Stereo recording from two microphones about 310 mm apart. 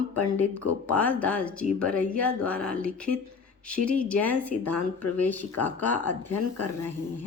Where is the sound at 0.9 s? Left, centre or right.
Centre.